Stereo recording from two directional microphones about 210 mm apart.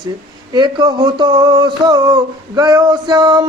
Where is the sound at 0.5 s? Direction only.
20° right (ahead or behind).